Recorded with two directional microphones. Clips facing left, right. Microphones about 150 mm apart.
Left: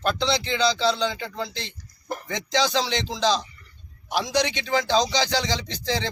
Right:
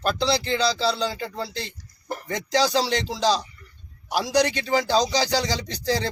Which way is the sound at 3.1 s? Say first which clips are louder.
Right 1 dB; 10° right (ahead or behind).